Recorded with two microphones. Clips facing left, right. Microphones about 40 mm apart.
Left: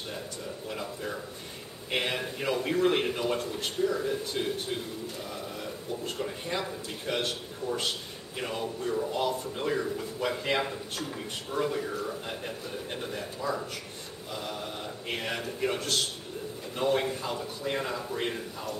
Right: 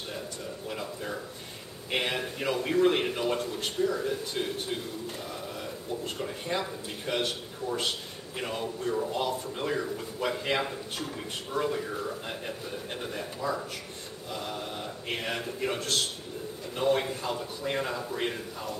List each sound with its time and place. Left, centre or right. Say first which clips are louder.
0.7 s speech: even; centre